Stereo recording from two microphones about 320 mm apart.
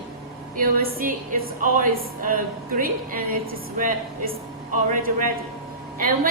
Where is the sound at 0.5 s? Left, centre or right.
Right.